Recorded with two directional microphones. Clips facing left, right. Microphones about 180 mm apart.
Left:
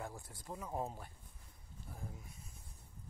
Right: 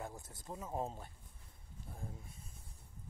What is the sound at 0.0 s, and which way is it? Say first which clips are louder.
Speech: even; 20° right (ahead or behind).